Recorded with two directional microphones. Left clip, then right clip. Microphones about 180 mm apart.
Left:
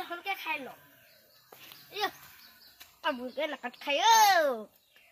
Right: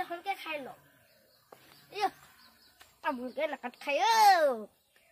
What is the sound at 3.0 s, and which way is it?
Speech, 25° right (ahead or behind).